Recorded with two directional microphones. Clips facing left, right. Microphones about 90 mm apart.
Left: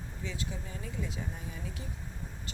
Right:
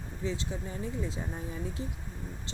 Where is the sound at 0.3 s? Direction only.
30° right (ahead or behind).